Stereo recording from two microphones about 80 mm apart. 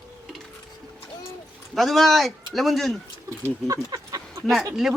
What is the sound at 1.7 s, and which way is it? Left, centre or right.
Speech, centre.